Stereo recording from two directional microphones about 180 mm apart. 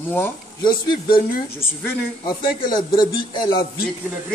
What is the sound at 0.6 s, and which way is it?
Speech, 25° left (ahead or behind).